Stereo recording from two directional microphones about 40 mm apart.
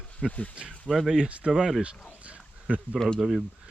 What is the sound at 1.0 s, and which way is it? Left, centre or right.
Speech, centre.